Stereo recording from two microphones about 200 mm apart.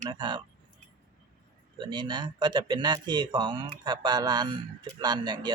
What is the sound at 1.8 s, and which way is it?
Speech, 20° right (ahead or behind).